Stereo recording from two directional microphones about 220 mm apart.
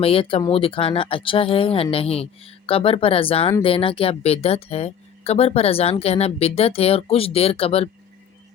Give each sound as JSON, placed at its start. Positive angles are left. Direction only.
{"t": 0.0, "sound": "speech", "side_deg": 25}